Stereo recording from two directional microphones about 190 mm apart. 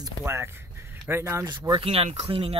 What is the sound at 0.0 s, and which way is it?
Speech, 15° right (ahead or behind).